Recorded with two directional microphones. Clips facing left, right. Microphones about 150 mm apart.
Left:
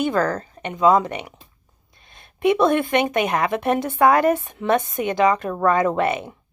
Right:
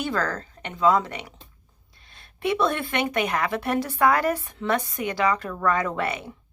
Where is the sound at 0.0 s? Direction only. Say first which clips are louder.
Left 6 dB; 20° left (ahead or behind).